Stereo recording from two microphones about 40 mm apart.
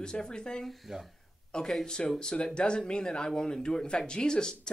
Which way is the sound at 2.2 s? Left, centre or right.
Centre.